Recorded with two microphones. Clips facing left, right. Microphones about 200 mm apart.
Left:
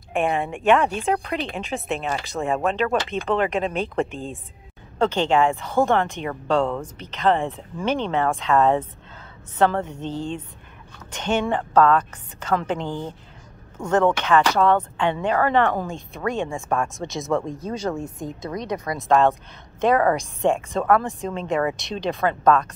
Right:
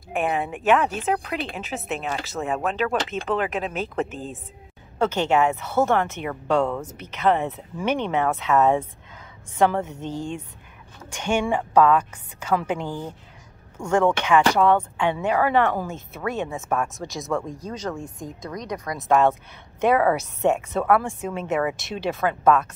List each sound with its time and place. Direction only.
0.1 s speech: 5° right (ahead or behind)
5.7 s speech: 15° left (ahead or behind)
6.1 s speech: 10° right (ahead or behind)
17.3 s speech: 25° left (ahead or behind)
18.5 s speech: 25° left (ahead or behind)
18.9 s speech: 5° right (ahead or behind)